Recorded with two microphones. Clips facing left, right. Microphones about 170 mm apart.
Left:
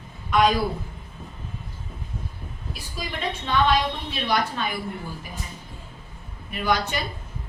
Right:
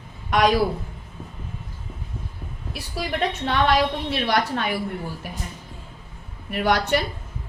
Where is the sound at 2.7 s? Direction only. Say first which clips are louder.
Right 6 dB; 75° right (ahead or behind).